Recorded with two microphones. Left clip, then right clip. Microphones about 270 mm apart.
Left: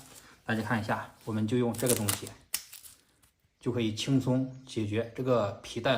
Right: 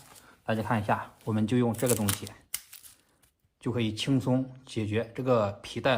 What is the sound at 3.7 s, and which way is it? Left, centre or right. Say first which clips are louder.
Speech: right 1 dB; right.